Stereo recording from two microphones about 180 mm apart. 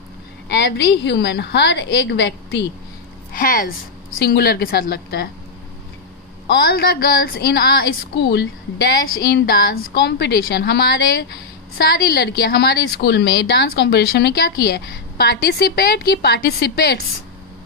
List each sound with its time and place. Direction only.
0.5 s a woman's voice: 70° left (ahead or behind)
3.3 s a woman's voice: 50° left (ahead or behind)
4.1 s a woman's voice: 60° left (ahead or behind)
6.4 s a woman's voice: 60° left (ahead or behind)